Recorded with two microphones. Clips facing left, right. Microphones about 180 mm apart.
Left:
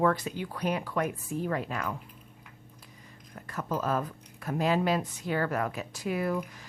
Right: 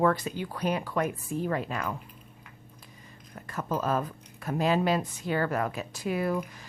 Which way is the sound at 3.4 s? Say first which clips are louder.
Right 1 dB; 25° right (ahead or behind).